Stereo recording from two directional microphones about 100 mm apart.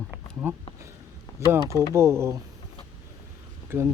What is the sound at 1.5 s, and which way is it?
Speech, 30° right (ahead or behind).